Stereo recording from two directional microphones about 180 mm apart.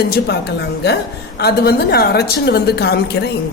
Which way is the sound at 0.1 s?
65° left (ahead or behind).